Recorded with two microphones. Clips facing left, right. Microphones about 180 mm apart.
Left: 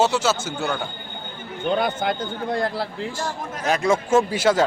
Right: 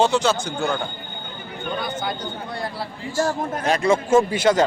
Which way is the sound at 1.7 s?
60° left (ahead or behind).